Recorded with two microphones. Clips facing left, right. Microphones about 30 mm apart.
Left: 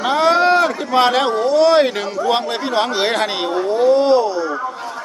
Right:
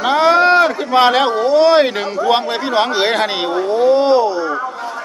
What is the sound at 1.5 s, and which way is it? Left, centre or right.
Speech, centre.